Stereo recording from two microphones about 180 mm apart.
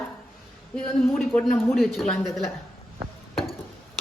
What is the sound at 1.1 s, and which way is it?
Speech, centre (ahead or behind).